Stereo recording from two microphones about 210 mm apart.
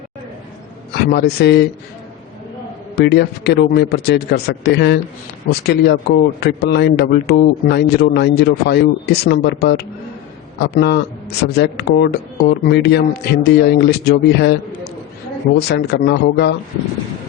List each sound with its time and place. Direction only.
0.9 s a man's voice: 50° left (ahead or behind)
2.9 s a man's voice: 50° left (ahead or behind)